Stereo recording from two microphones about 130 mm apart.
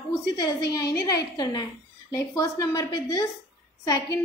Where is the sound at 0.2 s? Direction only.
30° left (ahead or behind).